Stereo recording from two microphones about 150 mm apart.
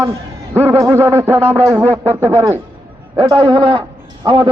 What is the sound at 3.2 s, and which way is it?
Speech, 30° right (ahead or behind).